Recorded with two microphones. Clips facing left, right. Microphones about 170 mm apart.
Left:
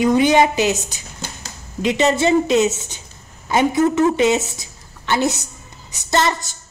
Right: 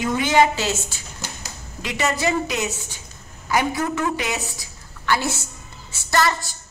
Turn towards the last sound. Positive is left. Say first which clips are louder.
# left 2 dB
turn(degrees=20)  # may be behind; listen again after turning